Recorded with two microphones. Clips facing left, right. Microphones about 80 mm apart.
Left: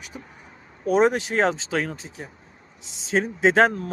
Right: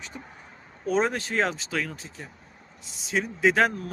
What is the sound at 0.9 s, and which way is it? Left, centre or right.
Speech, centre.